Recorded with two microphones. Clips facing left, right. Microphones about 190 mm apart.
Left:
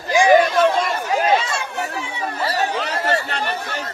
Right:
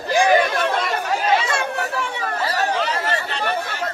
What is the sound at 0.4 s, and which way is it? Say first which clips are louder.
Chatter: left 4 dB; 55° right (ahead or behind).